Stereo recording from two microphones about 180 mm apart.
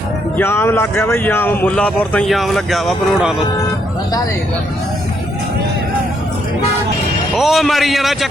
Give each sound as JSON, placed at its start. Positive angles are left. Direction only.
{"t": 0.3, "sound": "speech", "side_deg": 15}
{"t": 7.3, "sound": "a man's voice", "side_deg": 0}